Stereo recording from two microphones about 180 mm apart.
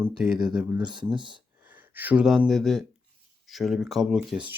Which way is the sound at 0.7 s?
25° right (ahead or behind).